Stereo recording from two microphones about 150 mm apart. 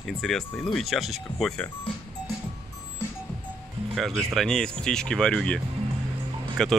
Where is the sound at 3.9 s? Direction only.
Centre (ahead or behind).